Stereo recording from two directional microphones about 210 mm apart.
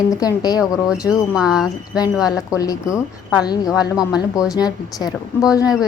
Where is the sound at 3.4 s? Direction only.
20° left (ahead or behind).